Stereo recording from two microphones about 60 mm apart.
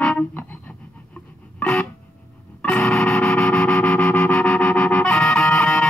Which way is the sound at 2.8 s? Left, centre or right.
Centre.